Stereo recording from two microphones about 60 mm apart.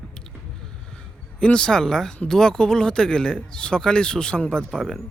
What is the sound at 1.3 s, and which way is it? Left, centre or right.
Speech, centre.